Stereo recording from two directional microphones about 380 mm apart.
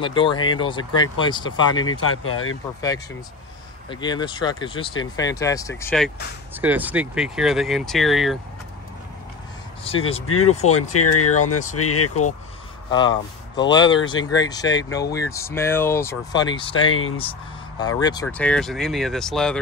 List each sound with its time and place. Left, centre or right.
0.0 s speech: centre
1.9 s speech: left
3.9 s speech: centre
10.6 s speech: left
12.9 s speech: centre